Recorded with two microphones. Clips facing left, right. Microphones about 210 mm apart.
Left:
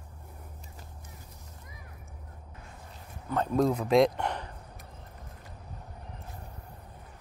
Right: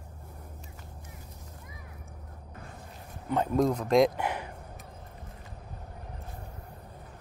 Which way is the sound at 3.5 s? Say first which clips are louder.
Even; 5° left (ahead or behind).